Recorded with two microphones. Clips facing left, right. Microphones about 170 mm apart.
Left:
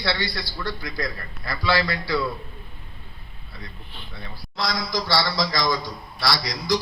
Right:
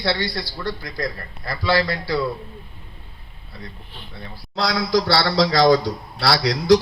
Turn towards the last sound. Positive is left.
turn(degrees=-65)  # may be behind; listen again after turning